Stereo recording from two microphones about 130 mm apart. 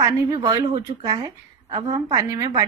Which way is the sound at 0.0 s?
30° right (ahead or behind).